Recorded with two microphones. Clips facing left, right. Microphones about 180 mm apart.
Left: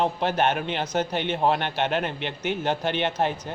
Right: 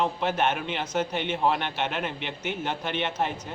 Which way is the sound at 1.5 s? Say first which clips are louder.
Left 3 dB; 35° left (ahead or behind).